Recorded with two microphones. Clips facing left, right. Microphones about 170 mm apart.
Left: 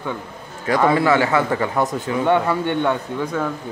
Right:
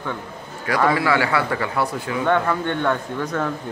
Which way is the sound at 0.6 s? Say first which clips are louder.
Left 3 dB; 20° left (ahead or behind).